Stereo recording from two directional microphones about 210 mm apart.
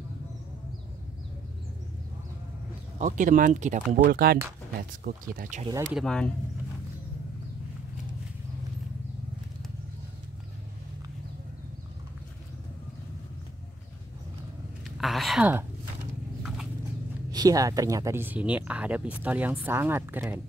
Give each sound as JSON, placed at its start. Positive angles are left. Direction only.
{"t": 3.0, "sound": "speech", "side_deg": -35}
{"t": 5.6, "sound": "speech", "side_deg": -20}
{"t": 5.9, "sound": "speech", "side_deg": 5}
{"t": 15.0, "sound": "a sound", "side_deg": 0}
{"t": 17.3, "sound": "speech", "side_deg": -20}